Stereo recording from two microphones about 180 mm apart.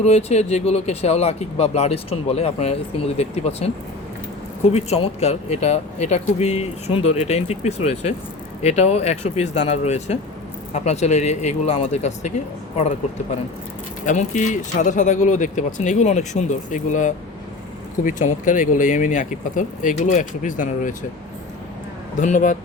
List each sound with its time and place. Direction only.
0.0 s speech: 35° left (ahead or behind)
4.7 s speech: 35° left (ahead or behind)
14.0 s speech: 45° left (ahead or behind)
22.2 s speech: 45° left (ahead or behind)